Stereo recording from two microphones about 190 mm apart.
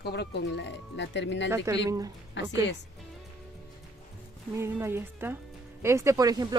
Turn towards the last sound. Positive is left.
turn(degrees=-20)  # may be behind; listen again after turning